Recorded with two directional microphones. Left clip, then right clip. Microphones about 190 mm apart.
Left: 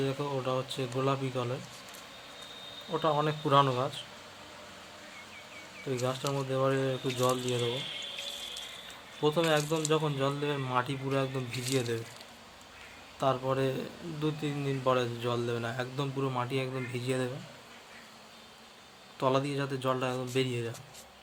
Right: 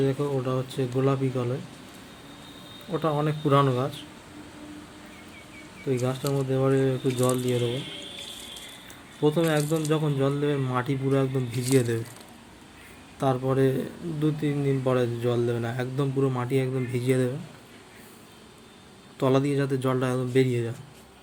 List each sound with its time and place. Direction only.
0.0 s speech: 5° right (ahead or behind)
2.9 s speech: 10° right (ahead or behind)
6.1 s speech: 5° right (ahead or behind)
9.2 s speech: 10° right (ahead or behind)
13.1 s speech: 10° right (ahead or behind)
19.2 s speech: 10° right (ahead or behind)